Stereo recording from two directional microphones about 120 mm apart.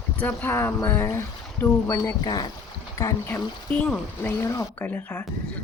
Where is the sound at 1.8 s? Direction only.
30° left (ahead or behind).